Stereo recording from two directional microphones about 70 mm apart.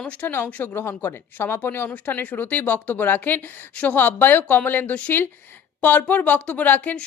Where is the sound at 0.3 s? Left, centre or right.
Left.